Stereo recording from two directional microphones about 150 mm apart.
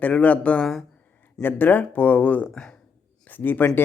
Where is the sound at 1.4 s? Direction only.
15° left (ahead or behind).